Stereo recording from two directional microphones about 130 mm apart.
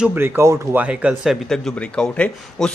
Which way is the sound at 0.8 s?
10° right (ahead or behind).